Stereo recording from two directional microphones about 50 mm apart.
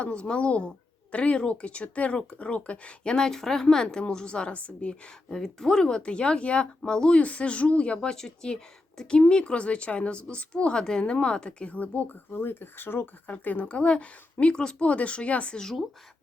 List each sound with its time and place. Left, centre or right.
0.0 s a woman's voice: left
5.3 s a woman's voice: centre
8.1 s a woman's voice: centre; by 13.1 s left
13.2 s a woman's voice: left; by 14.8 s centre
14.8 s a woman's voice: left
15.5 s speech: centre